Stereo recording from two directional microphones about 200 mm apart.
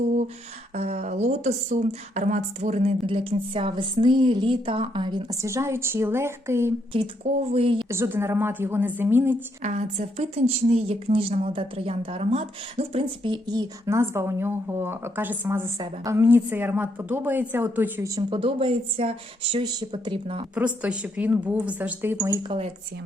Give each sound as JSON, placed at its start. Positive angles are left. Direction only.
{"t": 0.7, "sound": "a woman's voice", "side_deg": -35}
{"t": 6.9, "sound": "a woman's voice", "side_deg": -30}
{"t": 7.9, "sound": "speech", "side_deg": -15}
{"t": 9.6, "sound": "a woman's voice", "side_deg": -35}
{"t": 20.6, "sound": "speech", "side_deg": -5}